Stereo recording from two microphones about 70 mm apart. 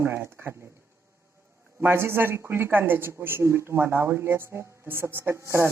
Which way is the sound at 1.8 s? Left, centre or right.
Right.